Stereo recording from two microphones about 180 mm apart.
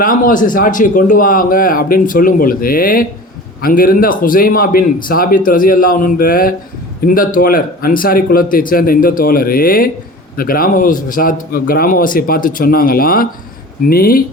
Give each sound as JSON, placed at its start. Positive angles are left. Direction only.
{"t": 0.0, "sound": "a man's voice", "side_deg": 50}